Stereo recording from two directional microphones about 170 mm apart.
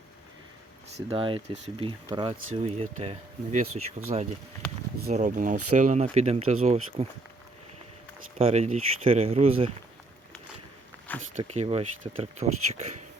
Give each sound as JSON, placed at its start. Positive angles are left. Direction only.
{"t": 0.9, "sound": "speech", "side_deg": -30}
{"t": 8.4, "sound": "speech", "side_deg": -35}
{"t": 11.3, "sound": "speech", "side_deg": -40}